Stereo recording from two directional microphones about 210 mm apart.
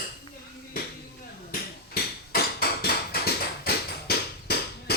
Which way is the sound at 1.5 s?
45° left (ahead or behind).